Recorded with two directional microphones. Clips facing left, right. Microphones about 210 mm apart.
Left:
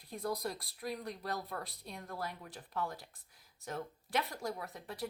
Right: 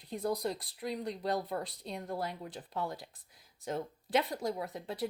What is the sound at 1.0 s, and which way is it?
Speech, 25° right (ahead or behind).